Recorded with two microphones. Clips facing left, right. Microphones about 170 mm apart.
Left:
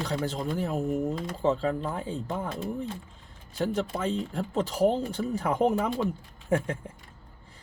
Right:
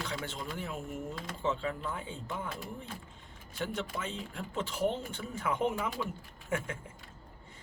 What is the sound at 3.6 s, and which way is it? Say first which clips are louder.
Speech: left 8 dB; 35° left (ahead or behind).